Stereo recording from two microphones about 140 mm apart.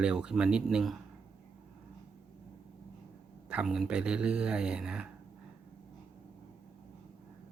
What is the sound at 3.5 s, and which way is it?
Speech, 5° right (ahead or behind).